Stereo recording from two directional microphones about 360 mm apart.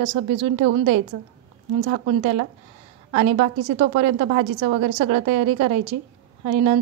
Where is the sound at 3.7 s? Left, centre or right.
Centre.